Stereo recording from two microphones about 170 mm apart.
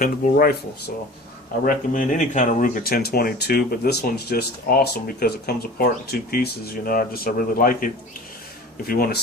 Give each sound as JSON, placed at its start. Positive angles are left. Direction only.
{"t": 0.0, "sound": "speech", "side_deg": 60}
{"t": 1.6, "sound": "speech", "side_deg": 50}
{"t": 8.9, "sound": "speech", "side_deg": 60}